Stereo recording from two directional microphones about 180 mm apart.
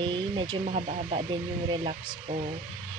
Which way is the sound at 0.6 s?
40° right (ahead or behind).